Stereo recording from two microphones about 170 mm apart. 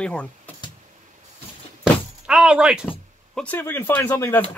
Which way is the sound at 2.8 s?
10° left (ahead or behind).